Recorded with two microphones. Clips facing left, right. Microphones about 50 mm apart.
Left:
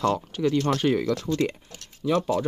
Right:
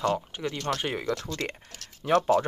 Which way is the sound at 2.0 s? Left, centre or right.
Right.